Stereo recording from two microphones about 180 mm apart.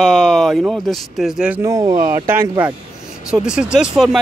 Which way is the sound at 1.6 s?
20° right (ahead or behind).